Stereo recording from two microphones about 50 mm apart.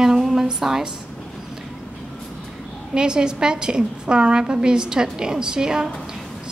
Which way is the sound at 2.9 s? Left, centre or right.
Centre.